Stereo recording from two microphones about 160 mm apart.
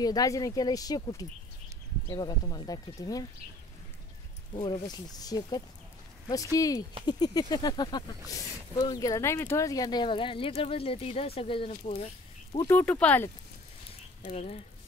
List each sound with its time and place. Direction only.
0.0 s speech: 25° left (ahead or behind)
4.6 s speech: 30° left (ahead or behind)
12.5 s speech: 15° left (ahead or behind)
14.2 s speech: 40° left (ahead or behind)